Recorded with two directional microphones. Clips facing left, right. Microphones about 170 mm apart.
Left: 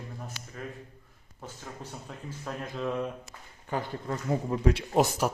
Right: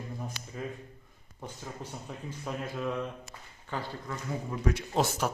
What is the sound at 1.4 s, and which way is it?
Speech, 10° right (ahead or behind).